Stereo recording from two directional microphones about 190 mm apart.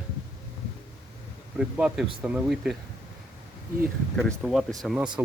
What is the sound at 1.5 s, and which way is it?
Speech, 5° right (ahead or behind).